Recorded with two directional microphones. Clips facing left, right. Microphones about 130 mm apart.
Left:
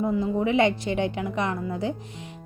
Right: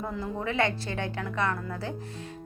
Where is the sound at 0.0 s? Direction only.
15° left (ahead or behind).